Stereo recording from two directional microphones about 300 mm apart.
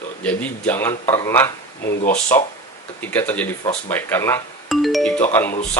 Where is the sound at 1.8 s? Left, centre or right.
Left.